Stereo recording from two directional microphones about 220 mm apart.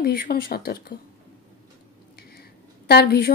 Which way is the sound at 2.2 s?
45° left (ahead or behind).